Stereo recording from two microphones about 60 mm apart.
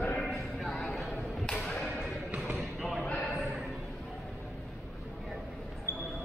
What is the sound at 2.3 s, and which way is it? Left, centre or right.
Basketball bounce, right.